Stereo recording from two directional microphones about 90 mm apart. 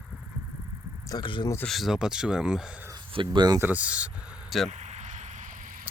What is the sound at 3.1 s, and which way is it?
Speech, 60° right (ahead or behind).